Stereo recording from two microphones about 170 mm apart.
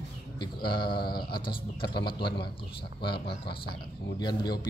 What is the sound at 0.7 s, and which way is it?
Speech, 65° left (ahead or behind).